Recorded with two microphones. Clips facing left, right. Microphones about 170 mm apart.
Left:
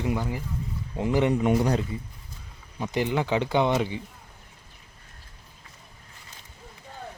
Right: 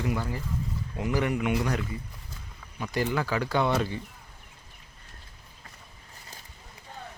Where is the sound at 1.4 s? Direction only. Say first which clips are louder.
Left 5 dB; 35° left (ahead or behind).